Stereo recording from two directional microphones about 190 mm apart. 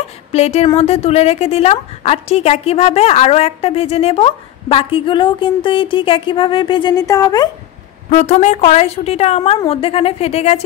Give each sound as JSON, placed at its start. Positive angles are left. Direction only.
{"t": 0.3, "sound": "a woman's voice", "side_deg": 35}
{"t": 8.1, "sound": "a woman's voice", "side_deg": 35}